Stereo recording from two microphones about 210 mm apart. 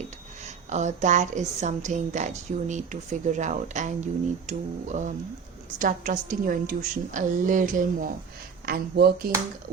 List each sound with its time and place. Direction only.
0.4 s a woman's voice: 35° right (ahead or behind)